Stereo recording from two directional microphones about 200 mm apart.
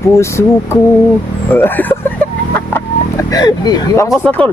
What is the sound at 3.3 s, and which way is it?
Speech, 20° left (ahead or behind).